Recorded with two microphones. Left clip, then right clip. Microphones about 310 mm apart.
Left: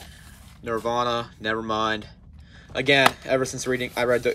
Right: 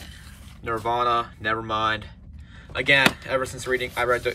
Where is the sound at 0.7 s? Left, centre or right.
Centre.